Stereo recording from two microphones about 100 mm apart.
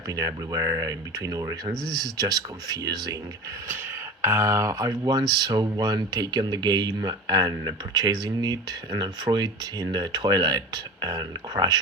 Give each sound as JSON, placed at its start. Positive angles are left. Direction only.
{"t": 0.1, "sound": "speech", "side_deg": -35}
{"t": 1.7, "sound": "speech", "side_deg": 5}
{"t": 2.0, "sound": "speech", "side_deg": -40}
{"t": 4.2, "sound": "speech", "side_deg": -25}